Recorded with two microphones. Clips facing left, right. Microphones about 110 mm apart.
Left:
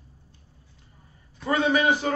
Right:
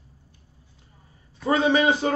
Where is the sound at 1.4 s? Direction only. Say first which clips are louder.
Right 2 dB; 25° right (ahead or behind).